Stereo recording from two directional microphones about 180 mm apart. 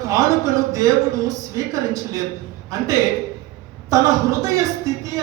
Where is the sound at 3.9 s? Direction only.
20° right (ahead or behind).